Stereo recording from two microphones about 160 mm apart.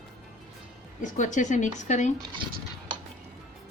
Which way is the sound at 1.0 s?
50° left (ahead or behind).